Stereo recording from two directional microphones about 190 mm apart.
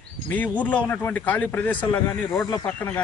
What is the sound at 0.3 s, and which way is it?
Speech, 10° left (ahead or behind).